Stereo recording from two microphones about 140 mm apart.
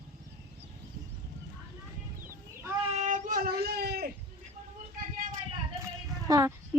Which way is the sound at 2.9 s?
60° right (ahead or behind).